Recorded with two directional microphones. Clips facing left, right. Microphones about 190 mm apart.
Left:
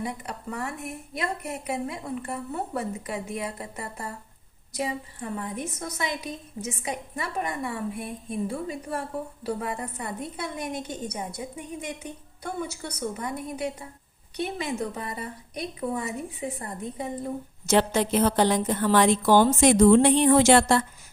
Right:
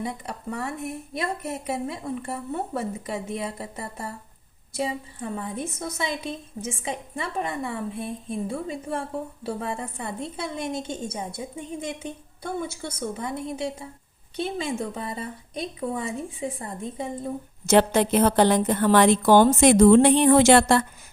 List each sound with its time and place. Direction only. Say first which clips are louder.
0.0 s a woman's voice: right 1 dB; 30° right (ahead or behind)
5.4 s a woman's voice: right 2 dB; 25° right (ahead or behind)
17.7 s a woman's voice: right 3 dB; 55° right (ahead or behind)